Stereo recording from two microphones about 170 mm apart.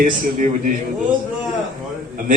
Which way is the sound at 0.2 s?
50° right (ahead or behind).